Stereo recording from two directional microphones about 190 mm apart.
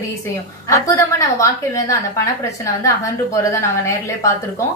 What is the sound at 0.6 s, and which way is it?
A woman's voice, 15° left (ahead or behind).